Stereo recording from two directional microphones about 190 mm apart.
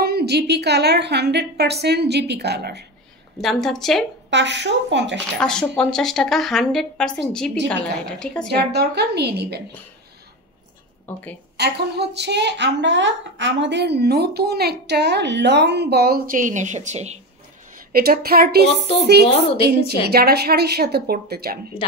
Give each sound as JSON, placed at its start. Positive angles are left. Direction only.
{"t": 0.0, "sound": "a woman's voice", "side_deg": -55}
{"t": 3.3, "sound": "a woman's voice", "side_deg": 0}
{"t": 4.3, "sound": "a woman's voice", "side_deg": -65}
{"t": 5.4, "sound": "a woman's voice", "side_deg": 5}
{"t": 8.5, "sound": "a woman's voice", "side_deg": -60}
{"t": 11.1, "sound": "a woman's voice", "side_deg": 10}
{"t": 11.5, "sound": "a woman's voice", "side_deg": -60}
{"t": 17.7, "sound": "a woman's voice", "side_deg": -50}
{"t": 19.2, "sound": "a woman's voice", "side_deg": 35}
{"t": 20.1, "sound": "a woman's voice", "side_deg": -55}